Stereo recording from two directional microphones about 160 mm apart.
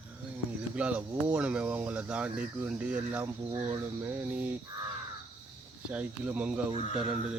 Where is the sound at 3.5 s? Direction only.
40° right (ahead or behind).